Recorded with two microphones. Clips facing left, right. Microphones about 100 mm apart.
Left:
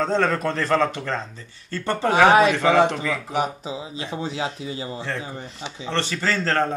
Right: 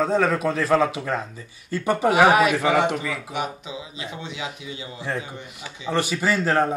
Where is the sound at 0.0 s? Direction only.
5° right (ahead or behind).